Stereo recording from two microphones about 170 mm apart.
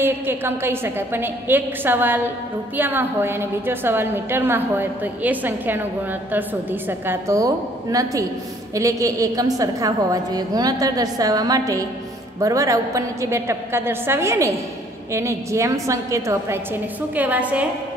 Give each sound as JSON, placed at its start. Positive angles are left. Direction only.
{"t": 0.0, "sound": "a woman's voice", "side_deg": -15}